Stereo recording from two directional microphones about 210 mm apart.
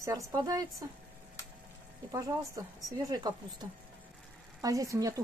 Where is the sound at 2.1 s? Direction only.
15° right (ahead or behind).